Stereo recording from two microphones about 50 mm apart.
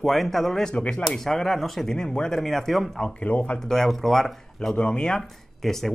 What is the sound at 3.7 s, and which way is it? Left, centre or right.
Speech, centre.